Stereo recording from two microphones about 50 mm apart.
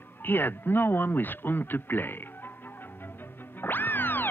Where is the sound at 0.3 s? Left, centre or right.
Left.